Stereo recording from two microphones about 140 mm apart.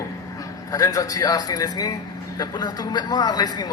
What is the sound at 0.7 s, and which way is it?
Speech, 25° left (ahead or behind).